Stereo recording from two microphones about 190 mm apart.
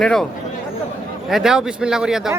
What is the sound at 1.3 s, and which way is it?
Speech, centre (ahead or behind).